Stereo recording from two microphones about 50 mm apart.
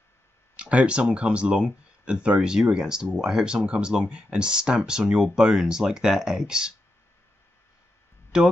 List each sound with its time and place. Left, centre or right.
0.6 s speech: right
8.3 s speech: centre